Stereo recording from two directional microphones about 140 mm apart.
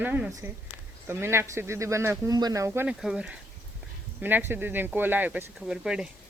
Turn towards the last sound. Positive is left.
turn(degrees=-5)  # may be behind; listen again after turning